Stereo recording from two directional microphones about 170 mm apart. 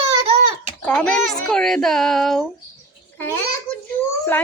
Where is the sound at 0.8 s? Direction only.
5° left (ahead or behind).